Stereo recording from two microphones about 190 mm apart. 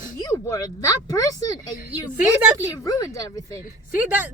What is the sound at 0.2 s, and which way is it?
A woman's voice, 20° left (ahead or behind).